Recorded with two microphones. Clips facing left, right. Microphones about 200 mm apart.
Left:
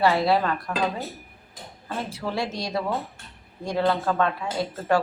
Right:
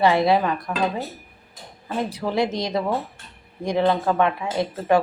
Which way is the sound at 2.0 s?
15° right (ahead or behind).